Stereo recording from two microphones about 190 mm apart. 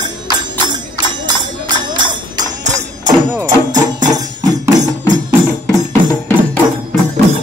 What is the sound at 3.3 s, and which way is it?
Music, 15° right (ahead or behind).